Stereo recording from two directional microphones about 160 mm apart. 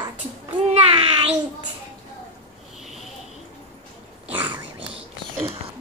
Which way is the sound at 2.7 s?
Centre (ahead or behind).